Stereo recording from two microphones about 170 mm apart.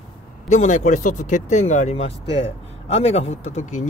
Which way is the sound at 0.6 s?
45° left (ahead or behind).